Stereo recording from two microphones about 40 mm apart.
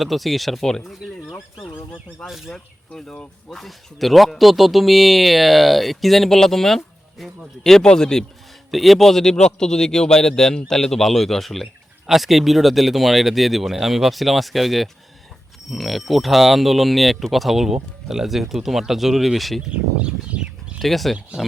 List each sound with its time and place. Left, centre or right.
0.0 s speech: centre
2.5 s speech: left
3.5 s a man's voice: centre
8.7 s a man's voice: centre
9.3 s a man's voice: centre
19.7 s a sound: right
20.7 s speech: centre